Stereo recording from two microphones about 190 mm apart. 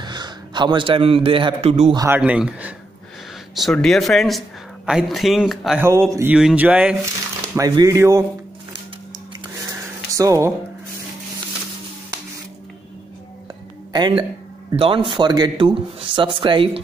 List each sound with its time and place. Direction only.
0.0 s a man's voice: 20° right (ahead or behind)
2.0 s speech: 10° right (ahead or behind)
5.8 s speech: 15° right (ahead or behind)
7.5 s speech: 20° right (ahead or behind)
10.1 s speech: 15° right (ahead or behind)
13.9 s a man's voice: 20° right (ahead or behind)